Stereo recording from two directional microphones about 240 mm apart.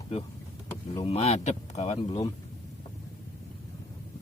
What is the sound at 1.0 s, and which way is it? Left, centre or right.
Speech, left.